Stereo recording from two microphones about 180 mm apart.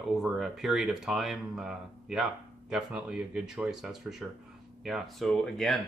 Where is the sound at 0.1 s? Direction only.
Centre (ahead or behind).